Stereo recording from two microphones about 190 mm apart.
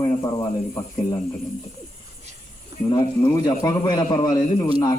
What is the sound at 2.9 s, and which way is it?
A man's voice, 20° left (ahead or behind).